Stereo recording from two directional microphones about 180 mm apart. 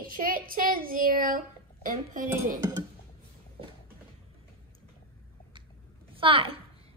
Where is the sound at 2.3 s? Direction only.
15° right (ahead or behind).